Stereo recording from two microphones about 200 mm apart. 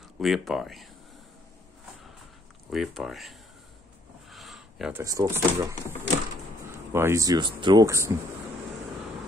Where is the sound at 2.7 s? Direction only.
Centre (ahead or behind).